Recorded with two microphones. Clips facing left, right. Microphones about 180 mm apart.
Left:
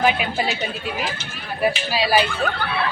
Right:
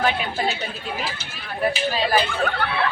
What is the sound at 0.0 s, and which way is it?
Speech, 15° left (ahead or behind).